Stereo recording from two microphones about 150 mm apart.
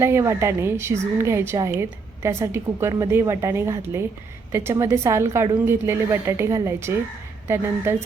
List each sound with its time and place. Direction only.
0.0 s a woman's voice: 20° right (ahead or behind)